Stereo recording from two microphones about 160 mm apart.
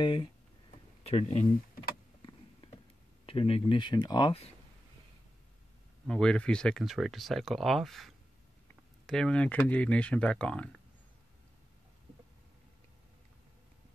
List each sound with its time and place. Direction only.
0.0 s speech: 30° left (ahead or behind)
1.0 s speech: 45° left (ahead or behind)
2.6 s a sound: 35° left (ahead or behind)
3.3 s speech: 35° left (ahead or behind)
6.0 s speech: 5° left (ahead or behind)